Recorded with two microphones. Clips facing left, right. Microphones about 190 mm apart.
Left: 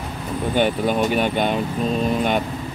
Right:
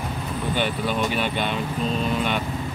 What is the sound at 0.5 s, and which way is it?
Speech, 45° left (ahead or behind).